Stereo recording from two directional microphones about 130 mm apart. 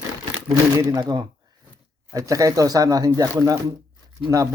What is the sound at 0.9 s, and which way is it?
Speech, 30° right (ahead or behind).